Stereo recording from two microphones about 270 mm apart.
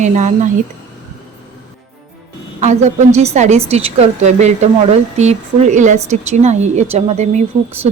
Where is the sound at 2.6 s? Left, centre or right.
Right.